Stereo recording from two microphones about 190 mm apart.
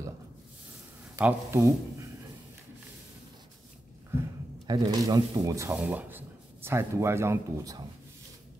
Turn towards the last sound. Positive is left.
turn(degrees=-15)  # may be behind; listen again after turning